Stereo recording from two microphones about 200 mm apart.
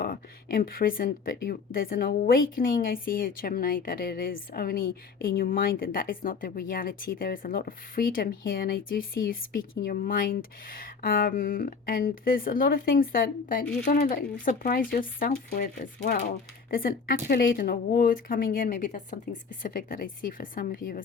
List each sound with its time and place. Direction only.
0.0 s a woman's voice: 45° left (ahead or behind)